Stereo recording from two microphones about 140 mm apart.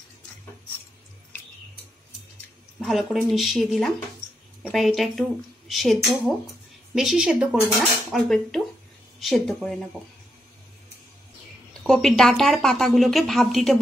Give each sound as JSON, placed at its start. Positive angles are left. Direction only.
{"t": 2.8, "sound": "speech", "side_deg": 0}
{"t": 11.7, "sound": "speech", "side_deg": 0}